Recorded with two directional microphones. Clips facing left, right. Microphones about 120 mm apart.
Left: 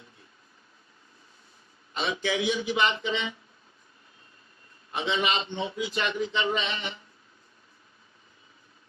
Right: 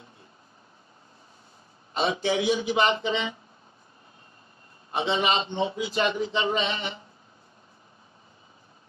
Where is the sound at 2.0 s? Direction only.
35° right (ahead or behind).